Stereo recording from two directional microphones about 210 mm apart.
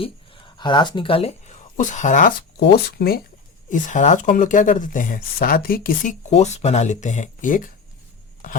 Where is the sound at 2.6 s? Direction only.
50° left (ahead or behind).